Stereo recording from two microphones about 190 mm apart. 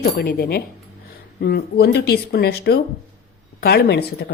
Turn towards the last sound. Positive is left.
turn(degrees=60)  # may be behind; listen again after turning